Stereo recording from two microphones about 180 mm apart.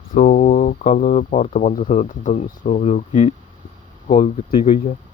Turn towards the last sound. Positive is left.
turn(degrees=35)  # may be behind; listen again after turning